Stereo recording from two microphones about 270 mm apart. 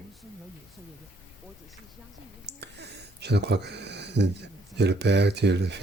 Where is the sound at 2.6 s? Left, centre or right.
Right.